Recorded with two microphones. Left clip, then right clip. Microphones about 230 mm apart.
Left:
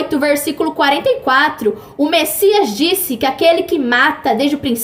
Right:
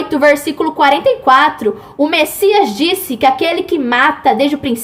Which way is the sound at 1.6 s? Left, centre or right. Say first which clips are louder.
Right 2 dB; centre.